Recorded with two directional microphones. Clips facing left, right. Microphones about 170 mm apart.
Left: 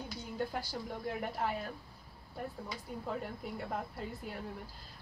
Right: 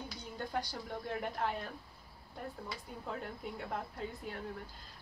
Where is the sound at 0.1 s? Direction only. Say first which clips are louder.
Left 2 dB; 5° left (ahead or behind).